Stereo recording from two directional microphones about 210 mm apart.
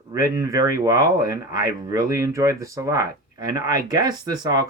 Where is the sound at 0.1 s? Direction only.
15° right (ahead or behind).